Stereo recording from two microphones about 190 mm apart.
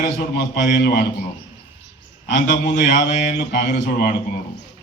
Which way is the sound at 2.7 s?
65° left (ahead or behind).